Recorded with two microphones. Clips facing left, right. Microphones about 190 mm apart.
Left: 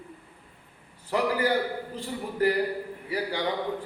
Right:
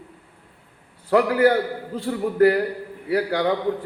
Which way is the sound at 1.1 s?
60° right (ahead or behind).